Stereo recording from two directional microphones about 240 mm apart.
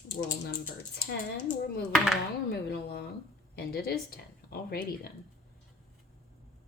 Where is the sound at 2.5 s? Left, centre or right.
Left.